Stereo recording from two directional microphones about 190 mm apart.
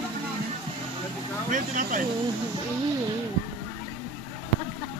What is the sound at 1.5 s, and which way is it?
Speech, 45° right (ahead or behind).